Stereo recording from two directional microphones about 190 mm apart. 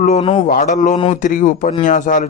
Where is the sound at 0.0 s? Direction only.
35° left (ahead or behind).